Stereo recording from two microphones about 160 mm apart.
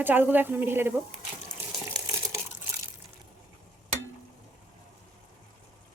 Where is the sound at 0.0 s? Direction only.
10° right (ahead or behind).